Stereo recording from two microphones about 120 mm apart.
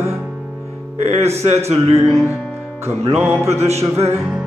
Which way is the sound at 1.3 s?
60° right (ahead or behind).